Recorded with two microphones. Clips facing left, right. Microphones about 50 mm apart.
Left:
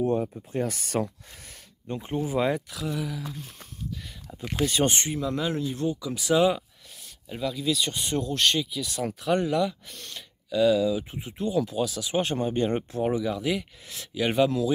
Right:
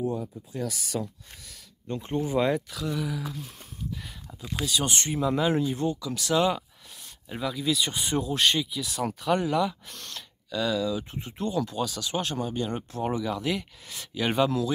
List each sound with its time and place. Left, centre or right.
0.0 s speech: left
1.9 s speech: centre
3.9 s a sound: centre
4.6 s speech: left
5.1 s speech: centre
5.9 s speech: centre
7.2 s speech: centre; by 13.0 s left
13.0 s speech: centre